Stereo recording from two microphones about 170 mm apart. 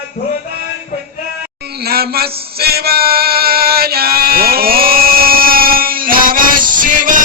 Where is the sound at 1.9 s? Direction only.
65° right (ahead or behind).